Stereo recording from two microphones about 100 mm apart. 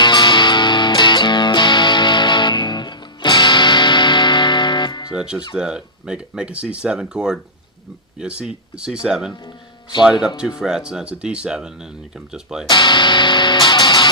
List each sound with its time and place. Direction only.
0.0 s music: 50° left (ahead or behind)
5.1 s speech: 10° right (ahead or behind)
12.6 s speech: 50° left (ahead or behind)